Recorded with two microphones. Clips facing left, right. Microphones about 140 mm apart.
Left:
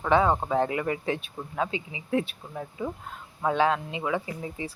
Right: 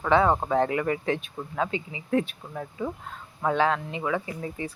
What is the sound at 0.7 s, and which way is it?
Speech, 20° left (ahead or behind).